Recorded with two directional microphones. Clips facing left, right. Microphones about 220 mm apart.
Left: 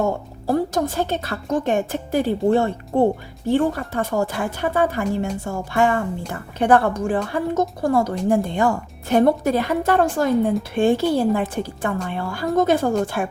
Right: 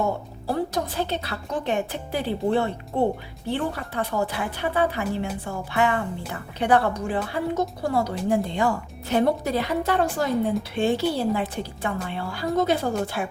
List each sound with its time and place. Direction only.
0.0 s speech: 45° left (ahead or behind)